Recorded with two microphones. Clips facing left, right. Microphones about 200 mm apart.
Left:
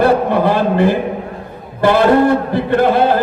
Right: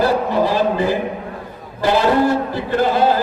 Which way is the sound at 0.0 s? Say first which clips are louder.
Left 4 dB; 60° left (ahead or behind).